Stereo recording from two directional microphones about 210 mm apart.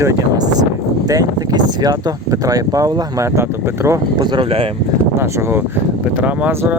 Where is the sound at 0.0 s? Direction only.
15° right (ahead or behind).